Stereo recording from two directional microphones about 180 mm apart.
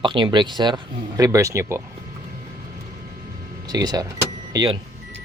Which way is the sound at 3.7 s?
20° right (ahead or behind).